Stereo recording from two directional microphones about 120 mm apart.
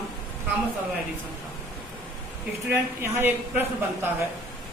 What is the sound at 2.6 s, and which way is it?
Speech, 20° right (ahead or behind).